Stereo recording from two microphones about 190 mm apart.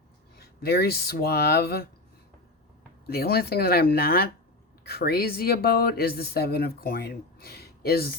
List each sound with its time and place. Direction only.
0.3 s speech: 55° left (ahead or behind)
3.1 s speech: 55° left (ahead or behind)